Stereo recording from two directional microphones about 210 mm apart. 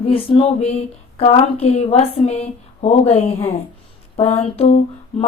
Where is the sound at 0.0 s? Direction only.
25° left (ahead or behind).